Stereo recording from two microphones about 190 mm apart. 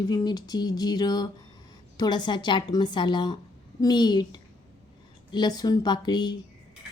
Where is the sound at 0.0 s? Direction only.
20° left (ahead or behind).